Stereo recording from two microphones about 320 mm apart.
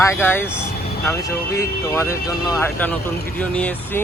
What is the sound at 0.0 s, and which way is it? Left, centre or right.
Speech, centre.